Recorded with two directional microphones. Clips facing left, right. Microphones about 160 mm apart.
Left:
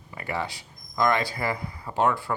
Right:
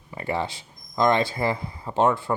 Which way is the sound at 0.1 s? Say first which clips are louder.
Right 4 dB; 25° right (ahead or behind).